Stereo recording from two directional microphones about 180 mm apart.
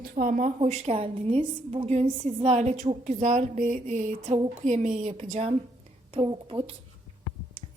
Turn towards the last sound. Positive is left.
turn(degrees=-30)  # may be behind; listen again after turning